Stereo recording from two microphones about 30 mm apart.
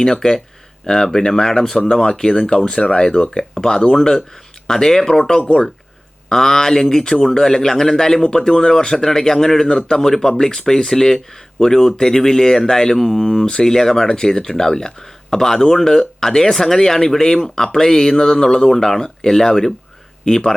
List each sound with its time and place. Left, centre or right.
0.0 s speech: centre
1.9 s speech: left
3.5 s speech: centre